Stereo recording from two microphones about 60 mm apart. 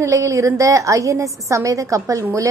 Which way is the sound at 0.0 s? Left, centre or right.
Right.